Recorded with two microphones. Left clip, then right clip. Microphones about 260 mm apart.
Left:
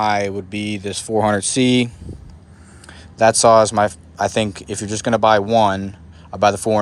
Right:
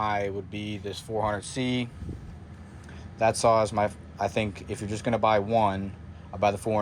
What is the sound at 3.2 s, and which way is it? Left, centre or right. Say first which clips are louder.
Speech: left 11 dB; centre.